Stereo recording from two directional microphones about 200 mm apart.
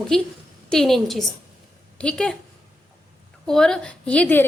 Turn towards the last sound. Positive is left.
turn(degrees=10)  # may be behind; listen again after turning